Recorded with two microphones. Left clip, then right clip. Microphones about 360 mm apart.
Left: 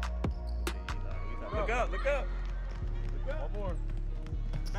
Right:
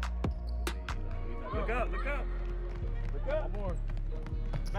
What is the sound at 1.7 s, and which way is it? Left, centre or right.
Speech, centre.